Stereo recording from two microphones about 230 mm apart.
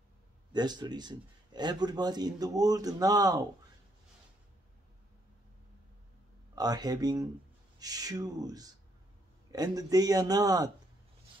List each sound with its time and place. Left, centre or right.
0.5 s speech: centre
6.5 s speech: centre